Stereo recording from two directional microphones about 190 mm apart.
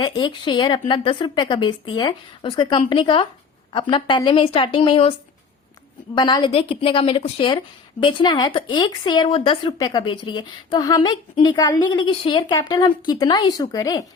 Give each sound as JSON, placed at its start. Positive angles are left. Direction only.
{"t": 0.2, "sound": "a woman's voice", "side_deg": 25}
{"t": 6.1, "sound": "a woman's voice", "side_deg": 25}